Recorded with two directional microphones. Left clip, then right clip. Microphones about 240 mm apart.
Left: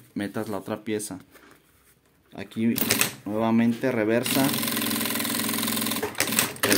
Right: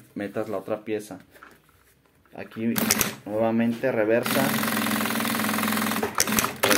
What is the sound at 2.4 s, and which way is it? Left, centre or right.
Speech, left.